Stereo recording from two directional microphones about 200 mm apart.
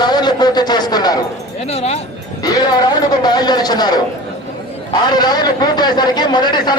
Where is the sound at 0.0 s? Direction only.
20° left (ahead or behind).